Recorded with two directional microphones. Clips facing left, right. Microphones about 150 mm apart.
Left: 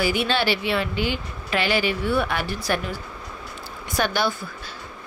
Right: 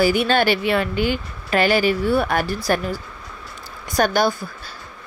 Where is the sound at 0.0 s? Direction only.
45° right (ahead or behind).